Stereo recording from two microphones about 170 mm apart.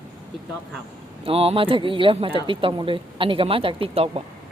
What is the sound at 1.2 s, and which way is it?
Speech, 35° right (ahead or behind).